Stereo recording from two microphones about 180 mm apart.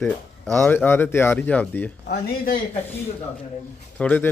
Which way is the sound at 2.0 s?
60° left (ahead or behind).